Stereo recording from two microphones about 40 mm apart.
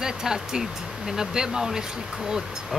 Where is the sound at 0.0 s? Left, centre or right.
Centre.